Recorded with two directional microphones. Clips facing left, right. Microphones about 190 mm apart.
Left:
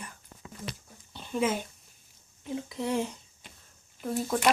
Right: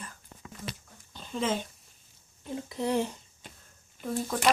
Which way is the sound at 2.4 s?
Centre (ahead or behind).